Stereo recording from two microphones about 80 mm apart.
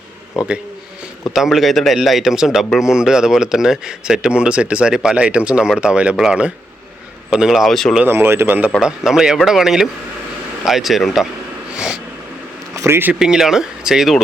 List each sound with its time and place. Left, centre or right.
0.4 s speech: centre
8.0 s speech: right
8.8 s speech: centre
12.7 s a sound: right
13.1 s speech: centre